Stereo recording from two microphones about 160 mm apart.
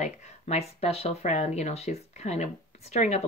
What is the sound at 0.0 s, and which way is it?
Speech, 45° left (ahead or behind).